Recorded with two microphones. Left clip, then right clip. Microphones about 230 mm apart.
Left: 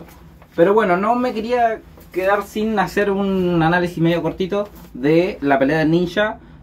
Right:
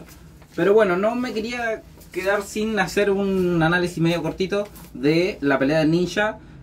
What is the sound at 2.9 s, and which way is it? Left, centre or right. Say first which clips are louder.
Speech: left 2 dB; centre.